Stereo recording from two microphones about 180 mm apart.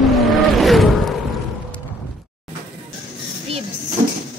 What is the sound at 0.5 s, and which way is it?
Wild animals, centre (ahead or behind).